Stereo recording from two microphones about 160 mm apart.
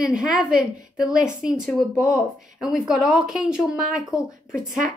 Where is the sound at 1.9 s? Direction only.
20° left (ahead or behind).